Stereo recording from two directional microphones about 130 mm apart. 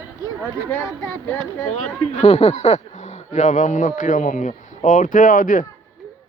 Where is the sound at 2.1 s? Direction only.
55° left (ahead or behind); by 5.6 s 90° left.